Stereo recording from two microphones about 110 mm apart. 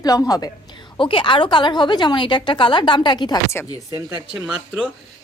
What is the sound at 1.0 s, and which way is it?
A woman's voice, 50° left (ahead or behind).